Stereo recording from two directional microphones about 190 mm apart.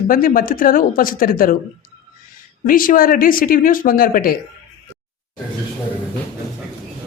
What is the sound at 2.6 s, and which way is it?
A woman's voice, 45° left (ahead or behind).